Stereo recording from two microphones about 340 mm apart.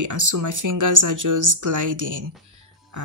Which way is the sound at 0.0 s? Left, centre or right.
Right.